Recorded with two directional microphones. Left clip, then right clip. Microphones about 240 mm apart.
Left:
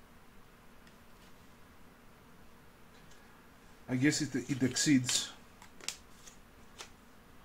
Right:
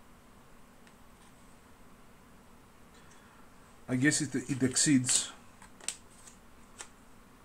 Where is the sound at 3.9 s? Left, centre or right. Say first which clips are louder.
Right 2 dB; centre.